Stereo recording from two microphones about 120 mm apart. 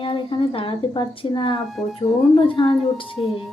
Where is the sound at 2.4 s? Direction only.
45° left (ahead or behind).